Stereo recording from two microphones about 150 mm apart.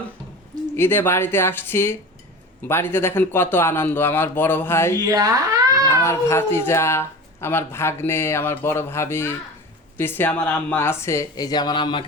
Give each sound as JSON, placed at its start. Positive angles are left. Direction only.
{"t": 0.8, "sound": "speech", "side_deg": 15}
{"t": 4.9, "sound": "a child's voice", "side_deg": -25}
{"t": 5.9, "sound": "speech", "side_deg": 20}